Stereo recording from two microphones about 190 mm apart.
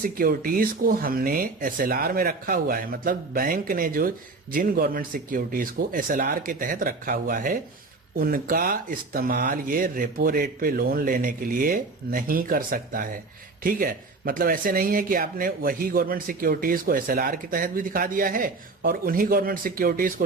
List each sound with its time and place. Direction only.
0.0 s speech: 50° right (ahead or behind)